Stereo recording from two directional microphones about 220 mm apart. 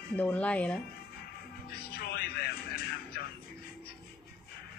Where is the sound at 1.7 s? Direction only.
45° left (ahead or behind).